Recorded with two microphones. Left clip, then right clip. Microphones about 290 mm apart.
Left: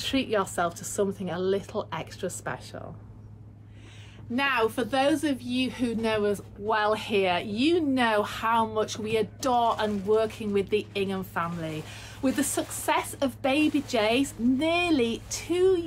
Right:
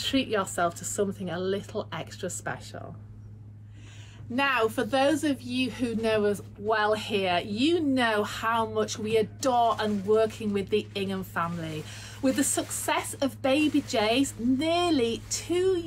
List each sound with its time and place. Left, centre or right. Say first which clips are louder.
0.0 s a woman's voice: left 1 dB; centre
4.4 s a woman's voice: even; centre